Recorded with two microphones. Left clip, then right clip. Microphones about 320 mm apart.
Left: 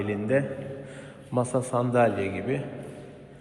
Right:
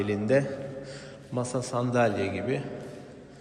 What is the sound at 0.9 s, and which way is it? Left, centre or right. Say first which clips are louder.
A man's voice: even; centre.